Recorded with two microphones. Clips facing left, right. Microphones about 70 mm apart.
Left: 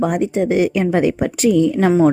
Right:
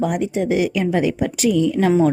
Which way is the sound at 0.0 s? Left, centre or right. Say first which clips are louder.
Left 3 dB; left.